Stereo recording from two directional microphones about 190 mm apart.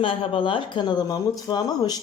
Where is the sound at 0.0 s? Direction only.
30° left (ahead or behind).